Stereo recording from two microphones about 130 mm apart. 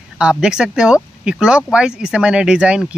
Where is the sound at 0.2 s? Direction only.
5° right (ahead or behind).